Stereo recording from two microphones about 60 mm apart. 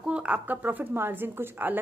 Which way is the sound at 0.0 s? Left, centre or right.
Centre.